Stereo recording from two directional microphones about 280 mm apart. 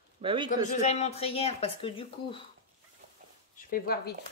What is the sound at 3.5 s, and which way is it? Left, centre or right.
Speech, left.